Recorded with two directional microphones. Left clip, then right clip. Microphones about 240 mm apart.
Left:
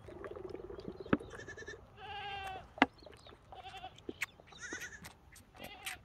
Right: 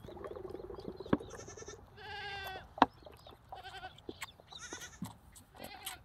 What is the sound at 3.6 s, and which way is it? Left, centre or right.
Goat, right.